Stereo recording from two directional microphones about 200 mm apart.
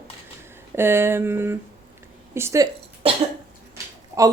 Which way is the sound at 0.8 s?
10° right (ahead or behind).